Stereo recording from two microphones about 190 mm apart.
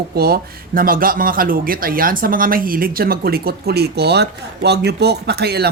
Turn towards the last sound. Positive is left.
turn(degrees=-55)  # may be behind; listen again after turning